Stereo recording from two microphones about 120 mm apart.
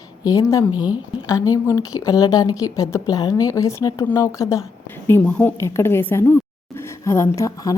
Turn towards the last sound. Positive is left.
turn(degrees=30)  # may be behind; listen again after turning